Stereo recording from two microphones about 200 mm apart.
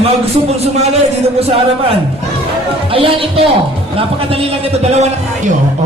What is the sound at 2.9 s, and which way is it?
Speech, 25° right (ahead or behind).